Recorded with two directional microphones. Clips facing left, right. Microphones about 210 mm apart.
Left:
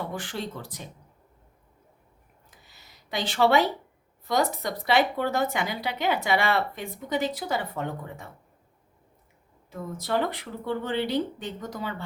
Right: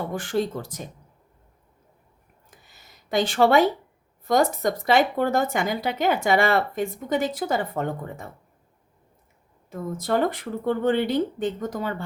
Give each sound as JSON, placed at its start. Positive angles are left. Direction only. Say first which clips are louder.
{"t": 0.1, "sound": "speech", "louder": "right 8 dB", "side_deg": -45}
{"t": 2.6, "sound": "a sound", "louder": "right 7 dB", "side_deg": -50}
{"t": 4.3, "sound": "speech", "louder": "right 5 dB", "side_deg": -45}
{"t": 9.6, "sound": "speech", "louder": "right 5 dB", "side_deg": -50}